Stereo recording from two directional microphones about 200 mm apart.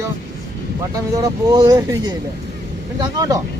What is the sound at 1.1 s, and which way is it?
Speech, 15° right (ahead or behind).